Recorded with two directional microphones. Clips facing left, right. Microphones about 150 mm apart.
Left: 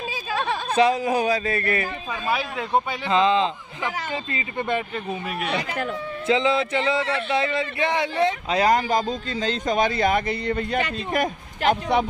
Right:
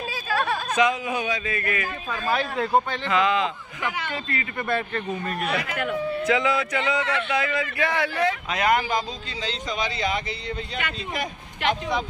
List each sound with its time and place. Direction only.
0.3 s a sound: 20° left (ahead or behind)
0.7 s speech: 35° left (ahead or behind)
2.3 s speech: centre (ahead or behind)
3.1 s speech: 25° left (ahead or behind); by 5.6 s 5° left (ahead or behind)
5.6 s speech: 35° left (ahead or behind); by 12.1 s 60° left (ahead or behind)